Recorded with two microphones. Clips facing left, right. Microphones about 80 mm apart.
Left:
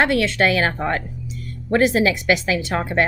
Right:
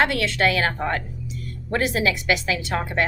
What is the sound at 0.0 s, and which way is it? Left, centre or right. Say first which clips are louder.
A woman's voice: left 3 dB; left.